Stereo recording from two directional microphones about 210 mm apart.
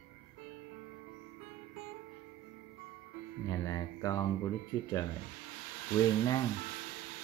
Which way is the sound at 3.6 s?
15° left (ahead or behind).